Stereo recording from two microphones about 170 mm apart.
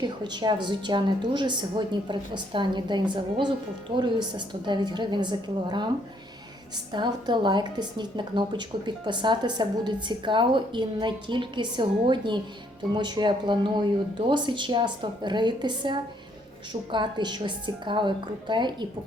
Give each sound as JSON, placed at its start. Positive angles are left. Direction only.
{"t": 0.0, "sound": "a woman's voice", "side_deg": -25}
{"t": 6.9, "sound": "a woman's voice", "side_deg": -25}